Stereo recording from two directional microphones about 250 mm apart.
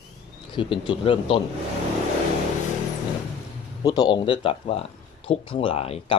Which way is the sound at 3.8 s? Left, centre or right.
Centre.